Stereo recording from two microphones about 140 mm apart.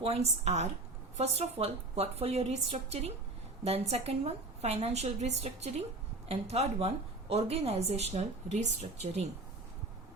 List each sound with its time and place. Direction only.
0.0 s a woman's voice: 45° right (ahead or behind)